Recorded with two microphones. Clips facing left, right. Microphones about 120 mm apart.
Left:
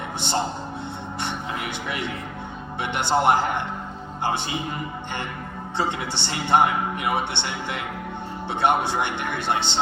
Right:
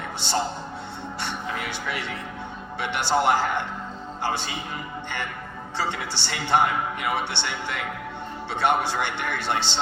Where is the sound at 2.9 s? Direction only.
20° left (ahead or behind).